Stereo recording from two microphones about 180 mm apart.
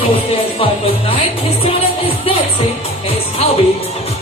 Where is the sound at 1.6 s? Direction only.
30° left (ahead or behind).